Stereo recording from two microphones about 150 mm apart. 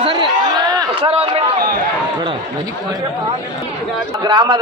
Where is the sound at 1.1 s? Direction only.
40° right (ahead or behind).